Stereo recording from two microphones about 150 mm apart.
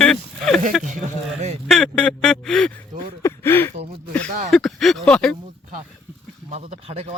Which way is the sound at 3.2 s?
15° left (ahead or behind).